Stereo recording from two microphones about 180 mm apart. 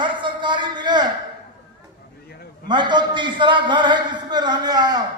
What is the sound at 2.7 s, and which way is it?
A man's voice, 25° right (ahead or behind).